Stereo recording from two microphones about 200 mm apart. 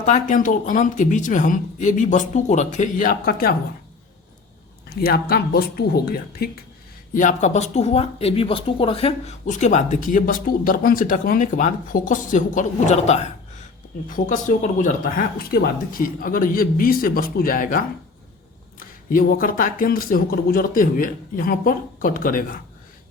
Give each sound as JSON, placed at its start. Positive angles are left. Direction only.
{"t": 0.0, "sound": "speech", "side_deg": 40}
{"t": 4.9, "sound": "speech", "side_deg": 50}
{"t": 7.1, "sound": "speech", "side_deg": 40}